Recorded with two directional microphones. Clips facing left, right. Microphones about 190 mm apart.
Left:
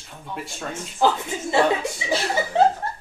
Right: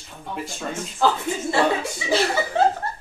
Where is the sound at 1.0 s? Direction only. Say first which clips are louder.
Left 1 dB; 15° left (ahead or behind).